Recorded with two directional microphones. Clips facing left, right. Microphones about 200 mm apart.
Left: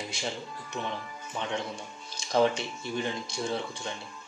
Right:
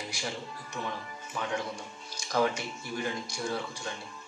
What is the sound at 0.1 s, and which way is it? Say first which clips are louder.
Music: left 2 dB; 25° left (ahead or behind).